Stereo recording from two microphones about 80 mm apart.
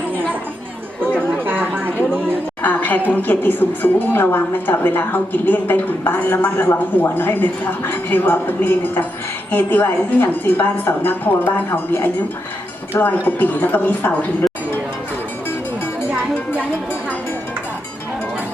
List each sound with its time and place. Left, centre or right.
1.1 s chatter: right
2.6 s a sound: left
3.1 s a woman's voice: left